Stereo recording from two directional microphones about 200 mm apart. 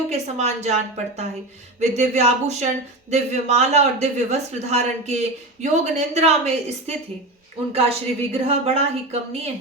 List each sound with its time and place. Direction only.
0.1 s speech: 35° right (ahead or behind)